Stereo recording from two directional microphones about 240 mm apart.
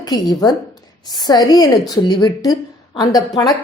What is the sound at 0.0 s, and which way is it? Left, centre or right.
A woman's voice, centre.